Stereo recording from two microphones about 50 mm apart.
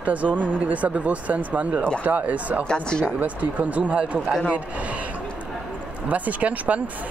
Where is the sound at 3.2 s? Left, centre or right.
Right.